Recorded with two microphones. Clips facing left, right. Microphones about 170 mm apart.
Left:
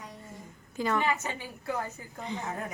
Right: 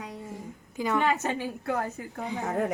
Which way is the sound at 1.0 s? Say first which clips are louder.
Right 5 dB; 70° right (ahead or behind).